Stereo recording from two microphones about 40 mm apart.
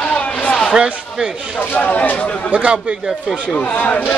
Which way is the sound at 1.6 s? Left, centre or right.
Left.